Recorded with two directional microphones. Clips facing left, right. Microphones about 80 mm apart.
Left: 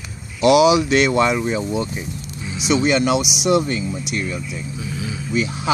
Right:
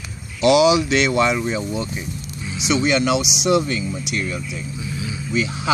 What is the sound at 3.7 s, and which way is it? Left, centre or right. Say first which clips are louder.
Speech: left 1 dB; left.